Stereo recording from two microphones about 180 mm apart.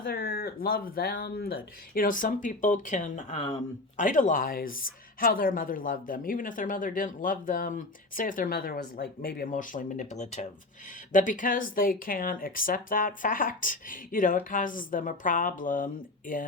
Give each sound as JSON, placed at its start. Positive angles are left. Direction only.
{"t": 0.0, "sound": "speech", "side_deg": 55}